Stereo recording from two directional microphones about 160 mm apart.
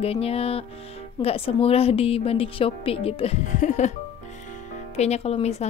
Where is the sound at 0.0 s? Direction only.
40° left (ahead or behind).